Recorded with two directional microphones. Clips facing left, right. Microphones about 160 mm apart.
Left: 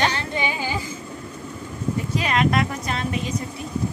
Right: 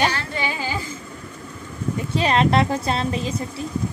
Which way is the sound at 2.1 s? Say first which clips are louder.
Right 4 dB; 30° right (ahead or behind).